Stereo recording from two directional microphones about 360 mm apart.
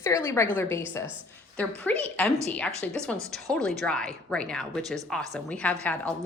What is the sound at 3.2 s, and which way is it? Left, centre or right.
Speech, centre.